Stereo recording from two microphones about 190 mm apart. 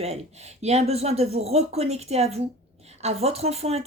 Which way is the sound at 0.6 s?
35° right (ahead or behind).